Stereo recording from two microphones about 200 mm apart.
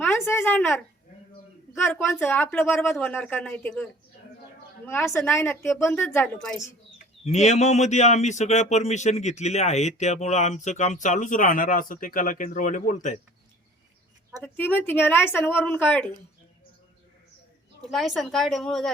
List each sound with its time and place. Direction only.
0.0 s a woman's voice: 10° left (ahead or behind)
5.3 s a woman's voice: 10° left (ahead or behind)
7.3 s a man's voice: 35° left (ahead or behind)
14.4 s a woman's voice: 10° left (ahead or behind)
17.9 s a woman's voice: centre (ahead or behind)